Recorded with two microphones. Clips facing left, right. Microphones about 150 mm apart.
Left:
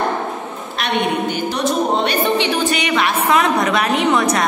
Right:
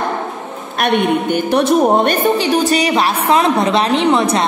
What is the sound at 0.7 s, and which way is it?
A woman's voice, 55° right (ahead or behind).